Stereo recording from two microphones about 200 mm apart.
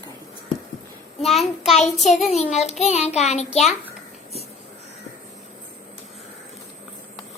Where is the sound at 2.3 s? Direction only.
35° left (ahead or behind).